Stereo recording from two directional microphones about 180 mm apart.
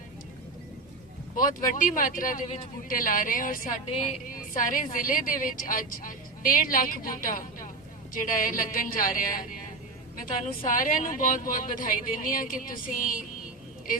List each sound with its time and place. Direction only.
1.4 s a woman's voice: 45° left (ahead or behind)
10.7 s a woman's voice: 50° left (ahead or behind)